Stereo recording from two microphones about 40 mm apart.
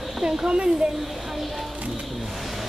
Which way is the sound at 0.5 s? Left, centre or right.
Right.